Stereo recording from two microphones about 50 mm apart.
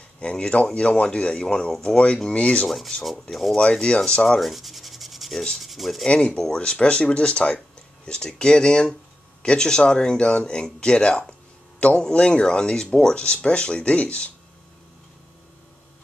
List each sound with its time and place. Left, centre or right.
0.2 s speech: left
2.6 s rub: centre
3.6 s speech: centre
4.4 s rub: centre
6.0 s speech: centre